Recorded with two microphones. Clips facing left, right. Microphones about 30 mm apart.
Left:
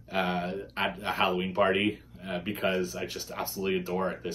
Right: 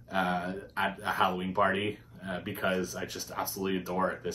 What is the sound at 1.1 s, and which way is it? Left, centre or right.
Speech, left.